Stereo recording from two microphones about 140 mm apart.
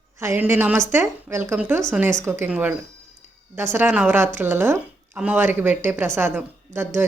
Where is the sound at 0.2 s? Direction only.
20° right (ahead or behind).